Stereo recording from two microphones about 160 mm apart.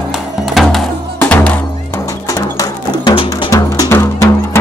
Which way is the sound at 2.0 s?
20° left (ahead or behind).